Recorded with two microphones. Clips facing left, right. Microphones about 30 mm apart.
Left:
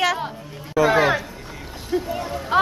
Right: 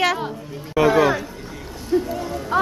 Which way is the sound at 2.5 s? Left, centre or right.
Left.